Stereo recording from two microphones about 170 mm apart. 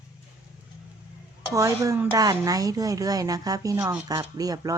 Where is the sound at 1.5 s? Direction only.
20° right (ahead or behind).